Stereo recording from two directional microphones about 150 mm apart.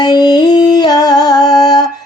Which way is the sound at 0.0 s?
30° left (ahead or behind).